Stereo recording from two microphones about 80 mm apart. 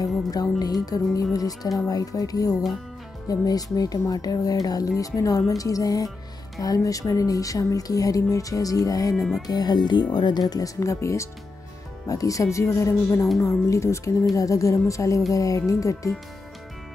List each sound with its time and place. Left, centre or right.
0.3 s speech: left
10.5 s speech: left